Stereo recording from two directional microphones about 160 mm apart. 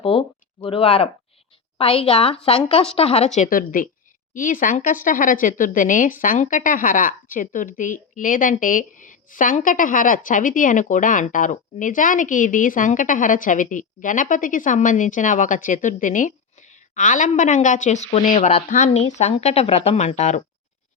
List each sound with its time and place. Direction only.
0.0 s a woman's voice: 35° left (ahead or behind)